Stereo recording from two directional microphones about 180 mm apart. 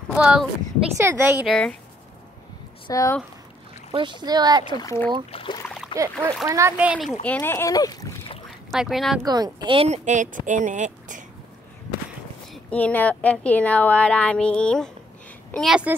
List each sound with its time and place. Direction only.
0.1 s speech: 5° right (ahead or behind)
1.4 s speech: 5° left (ahead or behind)
2.9 s a woman's voice: 20° left (ahead or behind)
3.9 s speech: 25° right (ahead or behind)
4.7 s a woman's voice: 15° left (ahead or behind)
5.3 s speech: 30° left (ahead or behind)
5.9 s speech: 15° right (ahead or behind)
7.2 s a woman's voice: 10° left (ahead or behind)
8.7 s speech: centre (ahead or behind)
9.2 s speech: 20° right (ahead or behind); by 11.2 s 45° right (ahead or behind)
12.6 s a woman's voice: 10° left (ahead or behind)